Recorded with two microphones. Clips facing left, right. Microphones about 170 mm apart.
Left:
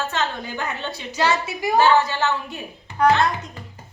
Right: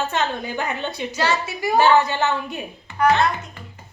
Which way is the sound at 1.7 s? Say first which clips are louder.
Right 1 dB; 15° right (ahead or behind).